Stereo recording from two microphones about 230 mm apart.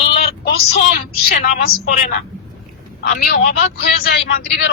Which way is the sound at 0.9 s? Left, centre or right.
Left.